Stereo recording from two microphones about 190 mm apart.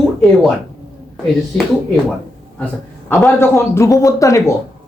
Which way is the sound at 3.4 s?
15° left (ahead or behind).